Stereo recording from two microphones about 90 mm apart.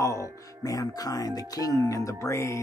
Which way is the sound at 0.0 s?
35° left (ahead or behind).